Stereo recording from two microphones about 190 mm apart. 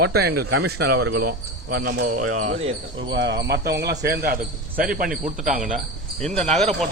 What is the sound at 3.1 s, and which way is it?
Speech, 65° right (ahead or behind).